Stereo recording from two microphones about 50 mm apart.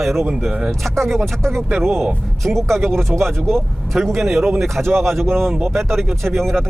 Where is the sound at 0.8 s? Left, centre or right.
Centre.